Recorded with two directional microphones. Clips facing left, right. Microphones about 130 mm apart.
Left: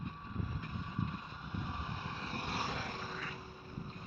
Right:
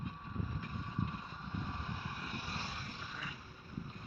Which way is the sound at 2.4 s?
90° left.